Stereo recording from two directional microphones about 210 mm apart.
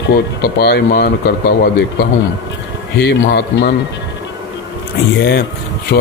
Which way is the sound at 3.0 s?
55° left (ahead or behind).